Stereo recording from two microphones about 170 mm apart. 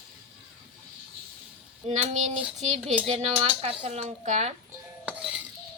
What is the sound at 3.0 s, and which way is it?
Speech, 35° right (ahead or behind).